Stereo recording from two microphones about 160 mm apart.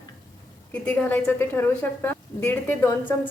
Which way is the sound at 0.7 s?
10° left (ahead or behind).